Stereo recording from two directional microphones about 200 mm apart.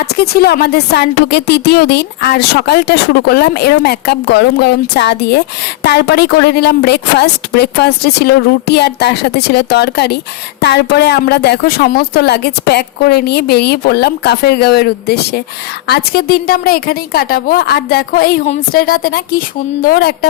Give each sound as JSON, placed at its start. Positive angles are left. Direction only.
{"t": 0.0, "sound": "a woman's voice", "side_deg": 50}